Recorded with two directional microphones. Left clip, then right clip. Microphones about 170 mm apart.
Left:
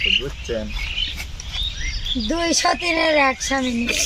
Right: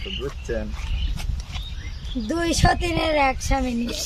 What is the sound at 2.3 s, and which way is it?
Speech, 40° right (ahead or behind).